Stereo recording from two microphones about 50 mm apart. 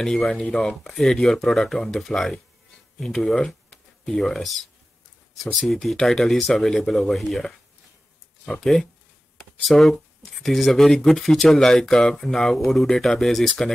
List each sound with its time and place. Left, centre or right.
0.0 s speech: centre
8.5 s speech: centre